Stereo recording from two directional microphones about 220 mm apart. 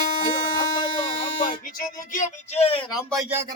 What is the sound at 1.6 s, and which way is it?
A man's voice, 35° left (ahead or behind).